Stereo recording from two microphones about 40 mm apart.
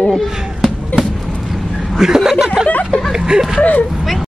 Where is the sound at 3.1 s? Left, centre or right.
Right.